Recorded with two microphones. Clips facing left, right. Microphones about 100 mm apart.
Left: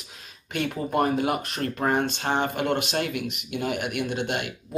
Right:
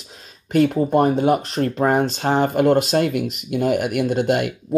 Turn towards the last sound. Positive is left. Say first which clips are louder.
# right 9 dB
turn(degrees=-45)  # may be behind; listen again after turning